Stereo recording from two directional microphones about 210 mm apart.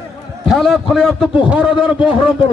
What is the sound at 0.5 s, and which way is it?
A man's voice, centre (ahead or behind).